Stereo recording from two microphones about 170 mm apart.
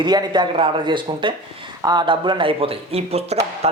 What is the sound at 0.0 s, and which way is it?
Speech, 25° right (ahead or behind).